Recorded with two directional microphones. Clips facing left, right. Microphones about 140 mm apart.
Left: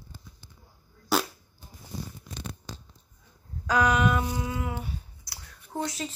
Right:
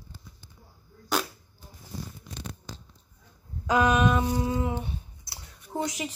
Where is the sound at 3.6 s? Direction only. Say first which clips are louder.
Right 1 dB; 20° right (ahead or behind).